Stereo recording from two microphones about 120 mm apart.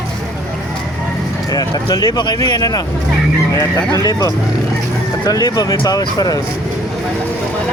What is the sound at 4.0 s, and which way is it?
Speech, 30° left (ahead or behind).